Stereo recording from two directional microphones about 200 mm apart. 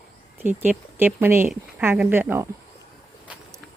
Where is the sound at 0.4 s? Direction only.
10° right (ahead or behind).